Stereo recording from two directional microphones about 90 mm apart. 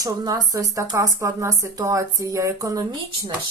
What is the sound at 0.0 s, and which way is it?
Speech, 40° right (ahead or behind).